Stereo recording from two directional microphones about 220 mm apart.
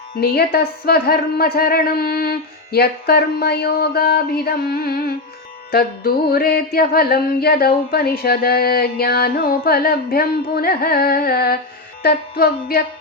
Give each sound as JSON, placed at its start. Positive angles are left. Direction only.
{"t": 0.2, "sound": "music", "side_deg": 45}